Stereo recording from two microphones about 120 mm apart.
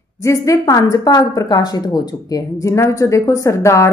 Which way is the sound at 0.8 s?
35° left (ahead or behind).